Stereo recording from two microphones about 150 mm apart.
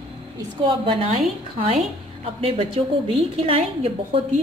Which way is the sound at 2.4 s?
40° right (ahead or behind).